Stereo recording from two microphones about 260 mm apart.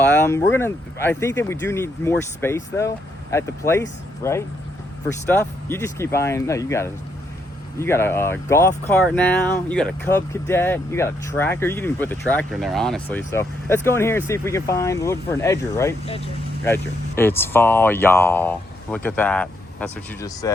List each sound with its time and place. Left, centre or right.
0.1 s speech: centre
16.0 s speech: left
16.6 s speech: centre